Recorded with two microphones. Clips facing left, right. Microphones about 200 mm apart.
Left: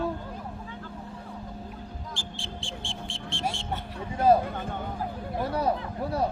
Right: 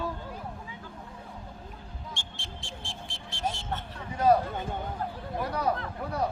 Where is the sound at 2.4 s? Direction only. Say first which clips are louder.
Left 5 dB; 30° left (ahead or behind).